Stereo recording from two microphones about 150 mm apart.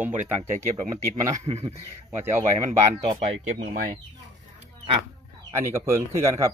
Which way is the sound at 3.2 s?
40° right (ahead or behind).